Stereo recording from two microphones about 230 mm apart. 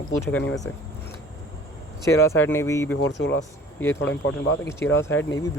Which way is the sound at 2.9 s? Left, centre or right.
Left.